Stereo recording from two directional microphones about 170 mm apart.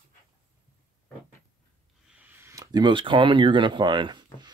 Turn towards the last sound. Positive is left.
turn(degrees=-25)  # may be behind; listen again after turning